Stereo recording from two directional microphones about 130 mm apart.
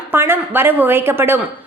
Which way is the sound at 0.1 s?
15° right (ahead or behind).